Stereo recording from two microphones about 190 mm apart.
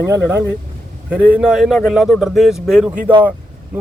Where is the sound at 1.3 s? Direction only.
5° right (ahead or behind).